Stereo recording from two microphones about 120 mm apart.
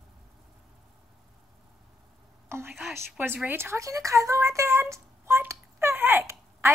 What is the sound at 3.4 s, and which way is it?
A woman's voice, 20° right (ahead or behind).